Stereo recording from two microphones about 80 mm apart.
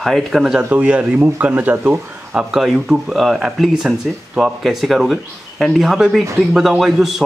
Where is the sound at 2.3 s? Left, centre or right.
Centre.